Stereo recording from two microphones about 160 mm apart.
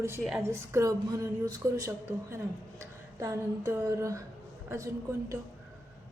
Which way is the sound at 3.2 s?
20° right (ahead or behind).